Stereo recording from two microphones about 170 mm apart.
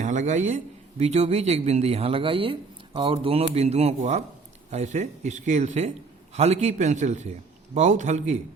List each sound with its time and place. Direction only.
0.0 s a man's voice: 45° right (ahead or behind)